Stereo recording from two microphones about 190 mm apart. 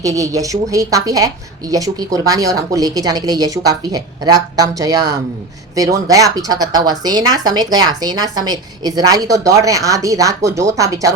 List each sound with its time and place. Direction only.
0.0 s a woman's voice: 15° right (ahead or behind)